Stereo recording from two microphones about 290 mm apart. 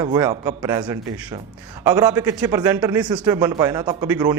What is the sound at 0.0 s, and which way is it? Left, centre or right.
A man's voice, centre.